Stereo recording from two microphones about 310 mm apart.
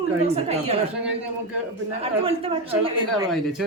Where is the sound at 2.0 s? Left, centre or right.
Centre.